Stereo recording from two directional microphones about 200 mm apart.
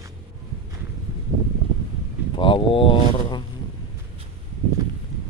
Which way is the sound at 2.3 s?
25° left (ahead or behind).